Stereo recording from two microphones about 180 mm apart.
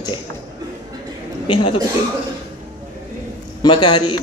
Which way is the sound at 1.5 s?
30° left (ahead or behind).